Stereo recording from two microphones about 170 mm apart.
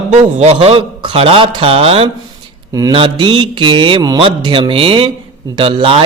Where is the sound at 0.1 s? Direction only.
40° right (ahead or behind).